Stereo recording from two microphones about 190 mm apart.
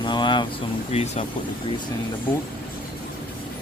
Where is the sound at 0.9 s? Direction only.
35° left (ahead or behind).